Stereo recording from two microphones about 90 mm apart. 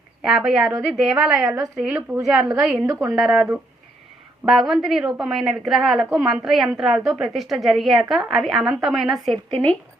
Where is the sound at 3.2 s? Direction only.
5° right (ahead or behind).